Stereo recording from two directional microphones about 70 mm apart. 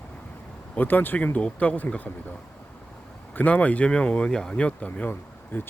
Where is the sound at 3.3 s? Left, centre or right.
Left.